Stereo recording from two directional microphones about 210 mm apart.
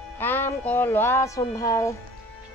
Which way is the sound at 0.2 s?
10° left (ahead or behind).